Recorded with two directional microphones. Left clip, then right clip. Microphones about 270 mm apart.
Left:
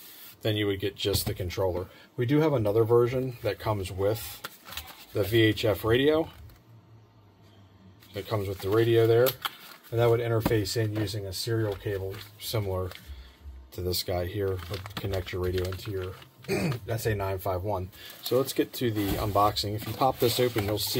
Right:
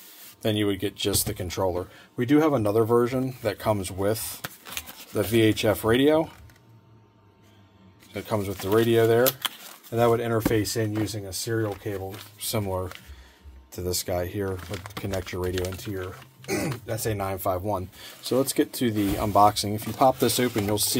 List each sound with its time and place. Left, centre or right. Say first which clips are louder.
0.4 s speech: right 3 dB; right
8.1 s speech: right 3 dB; right
12.4 s speech: right 3 dB; right
13.7 s speech: right 2 dB; right
16.4 s speech: right 2 dB; right